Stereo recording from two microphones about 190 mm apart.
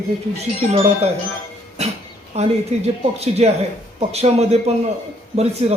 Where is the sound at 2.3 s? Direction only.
35° right (ahead or behind).